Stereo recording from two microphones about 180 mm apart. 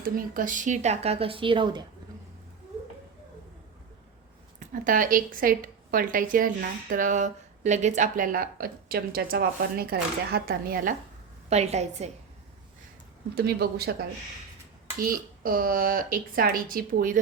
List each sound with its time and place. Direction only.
0.0 s speech: 50° right (ahead or behind); by 1.8 s 25° right (ahead or behind)
4.7 s a woman's voice: 45° right (ahead or behind)
11.4 s speech: 35° right (ahead or behind)
13.3 s speech: 60° right (ahead or behind)
14.9 s a woman's voice: 50° right (ahead or behind)